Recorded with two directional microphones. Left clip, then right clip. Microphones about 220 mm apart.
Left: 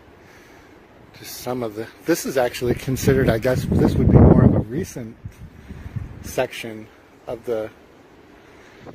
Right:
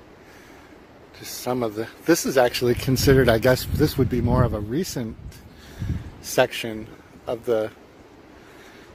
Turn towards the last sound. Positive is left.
turn(degrees=-20)  # may be behind; listen again after turning